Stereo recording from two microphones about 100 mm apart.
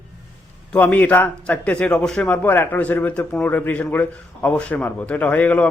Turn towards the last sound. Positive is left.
turn(degrees=15)  # may be behind; listen again after turning